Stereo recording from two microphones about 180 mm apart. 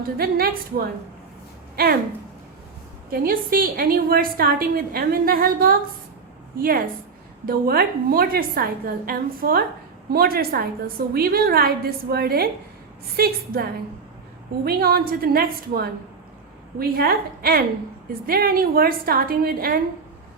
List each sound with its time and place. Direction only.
0.2 s a woman's voice: 55° right (ahead or behind)
1.8 s a woman's voice: 55° right (ahead or behind)
3.1 s a woman's voice: 55° right (ahead or behind)